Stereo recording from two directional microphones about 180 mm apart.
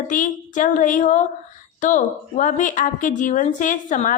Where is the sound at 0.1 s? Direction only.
45° left (ahead or behind).